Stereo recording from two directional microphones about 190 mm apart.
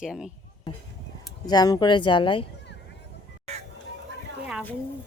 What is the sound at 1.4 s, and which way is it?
Speech, 20° left (ahead or behind).